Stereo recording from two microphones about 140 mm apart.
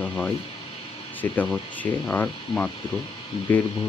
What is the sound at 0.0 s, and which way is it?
Speech, 10° left (ahead or behind).